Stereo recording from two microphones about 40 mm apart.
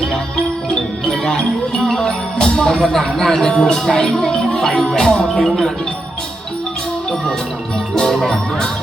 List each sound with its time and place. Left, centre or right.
0.7 s music: centre
7.9 s music: centre